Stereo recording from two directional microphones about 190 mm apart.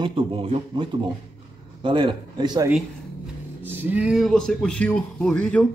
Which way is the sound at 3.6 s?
10° right (ahead or behind).